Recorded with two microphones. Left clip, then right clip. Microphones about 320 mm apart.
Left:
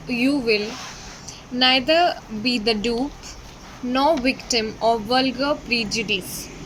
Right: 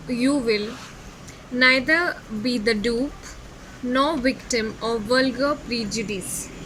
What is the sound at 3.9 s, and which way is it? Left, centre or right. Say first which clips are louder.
Speech: left 3 dB; left.